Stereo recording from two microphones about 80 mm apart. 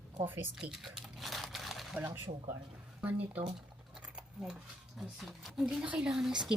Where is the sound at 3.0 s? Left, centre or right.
Centre.